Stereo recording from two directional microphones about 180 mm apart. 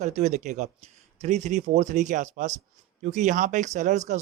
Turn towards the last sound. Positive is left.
turn(degrees=-40)  # may be behind; listen again after turning